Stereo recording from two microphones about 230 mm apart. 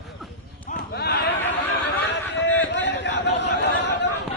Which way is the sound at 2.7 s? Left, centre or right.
Left.